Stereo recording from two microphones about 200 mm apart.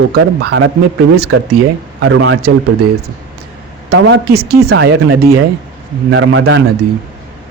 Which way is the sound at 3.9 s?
65° right (ahead or behind).